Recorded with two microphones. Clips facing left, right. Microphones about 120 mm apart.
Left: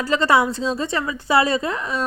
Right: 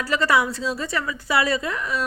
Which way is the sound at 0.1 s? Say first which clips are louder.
Left 3 dB; 25° left (ahead or behind).